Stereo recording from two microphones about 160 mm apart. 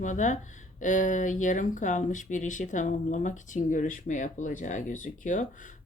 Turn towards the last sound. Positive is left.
turn(degrees=55)  # may be behind; listen again after turning